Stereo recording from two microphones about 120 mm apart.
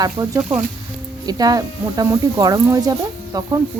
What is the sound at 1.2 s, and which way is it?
Speech, 30° right (ahead or behind).